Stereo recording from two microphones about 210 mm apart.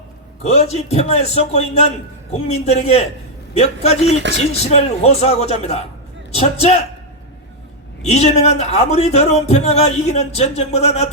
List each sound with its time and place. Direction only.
0.4 s a man's voice: 30° left (ahead or behind)
8.0 s speech: 30° left (ahead or behind)